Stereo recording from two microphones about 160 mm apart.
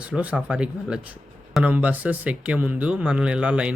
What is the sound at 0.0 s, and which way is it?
Speech, 10° right (ahead or behind).